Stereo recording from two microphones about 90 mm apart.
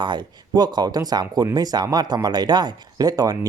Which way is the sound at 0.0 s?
55° right (ahead or behind).